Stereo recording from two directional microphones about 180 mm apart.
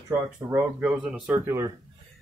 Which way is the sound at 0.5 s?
5° right (ahead or behind).